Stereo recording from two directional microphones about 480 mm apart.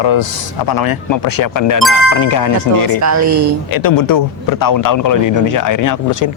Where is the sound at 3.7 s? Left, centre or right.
Left.